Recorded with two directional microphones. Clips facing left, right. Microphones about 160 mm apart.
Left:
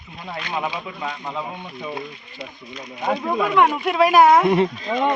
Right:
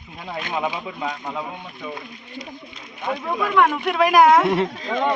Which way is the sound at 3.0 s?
25° left (ahead or behind).